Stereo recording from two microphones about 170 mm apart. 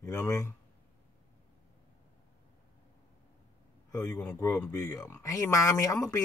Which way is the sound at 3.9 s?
20° left (ahead or behind).